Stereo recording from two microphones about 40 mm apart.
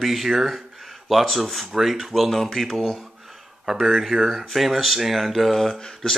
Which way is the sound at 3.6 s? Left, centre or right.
Centre.